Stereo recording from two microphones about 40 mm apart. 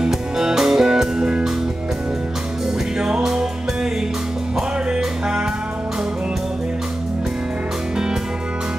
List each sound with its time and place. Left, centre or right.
0.4 s music: centre
3.0 s music: centre